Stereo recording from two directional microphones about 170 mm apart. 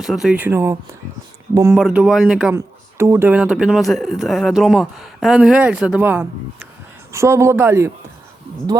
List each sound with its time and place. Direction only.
0.0 s speech: centre (ahead or behind)
2.6 s speech: 15° right (ahead or behind)